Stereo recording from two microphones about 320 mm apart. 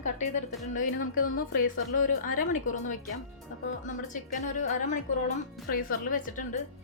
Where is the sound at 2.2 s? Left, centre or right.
Left.